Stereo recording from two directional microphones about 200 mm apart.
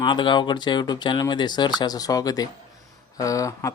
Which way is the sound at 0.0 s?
25° left (ahead or behind).